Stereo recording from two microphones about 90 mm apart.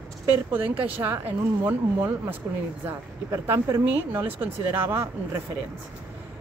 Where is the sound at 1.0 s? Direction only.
20° right (ahead or behind).